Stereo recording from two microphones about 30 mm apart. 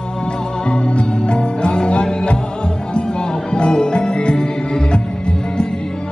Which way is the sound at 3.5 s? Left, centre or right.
Left.